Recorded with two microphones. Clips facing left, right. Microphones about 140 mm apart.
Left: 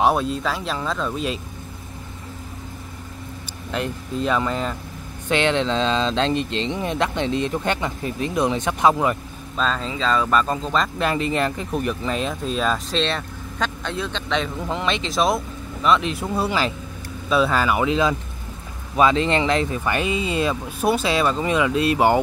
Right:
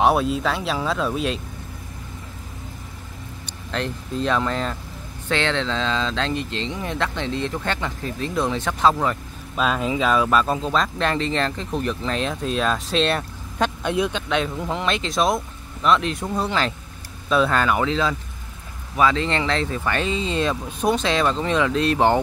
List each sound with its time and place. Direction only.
0.0 s speech: 5° right (ahead or behind)
3.7 s speech: 5° left (ahead or behind)
5.3 s speech: 15° left (ahead or behind)
9.6 s speech: 10° right (ahead or behind)
14.3 s speech: centre (ahead or behind)